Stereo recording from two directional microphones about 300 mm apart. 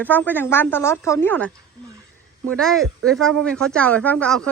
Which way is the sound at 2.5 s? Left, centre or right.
Centre.